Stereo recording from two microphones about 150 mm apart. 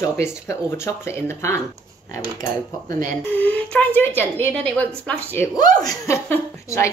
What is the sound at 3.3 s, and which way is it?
Speech, 10° left (ahead or behind).